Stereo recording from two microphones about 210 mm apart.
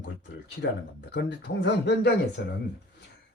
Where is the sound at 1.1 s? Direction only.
50° left (ahead or behind).